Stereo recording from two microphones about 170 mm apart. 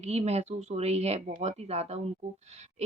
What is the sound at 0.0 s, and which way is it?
Speech, 40° right (ahead or behind).